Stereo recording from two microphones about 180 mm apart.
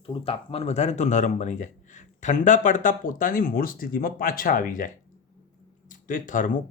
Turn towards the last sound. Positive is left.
turn(degrees=45)  # may be behind; listen again after turning